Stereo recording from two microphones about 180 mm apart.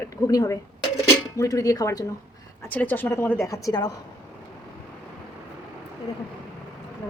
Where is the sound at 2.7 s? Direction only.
10° left (ahead or behind).